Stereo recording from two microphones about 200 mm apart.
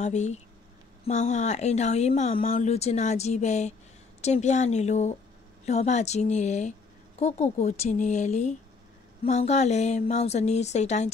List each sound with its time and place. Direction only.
0.0 s speech: 35° left (ahead or behind)